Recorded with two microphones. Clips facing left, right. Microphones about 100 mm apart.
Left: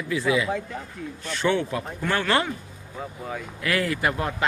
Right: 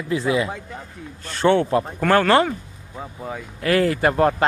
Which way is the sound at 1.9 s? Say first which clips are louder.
Right 8 dB; 50° right (ahead or behind).